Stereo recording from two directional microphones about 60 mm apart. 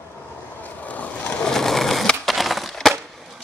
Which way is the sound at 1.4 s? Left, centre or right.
Centre.